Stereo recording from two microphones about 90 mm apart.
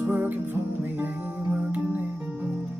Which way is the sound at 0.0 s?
20° right (ahead or behind).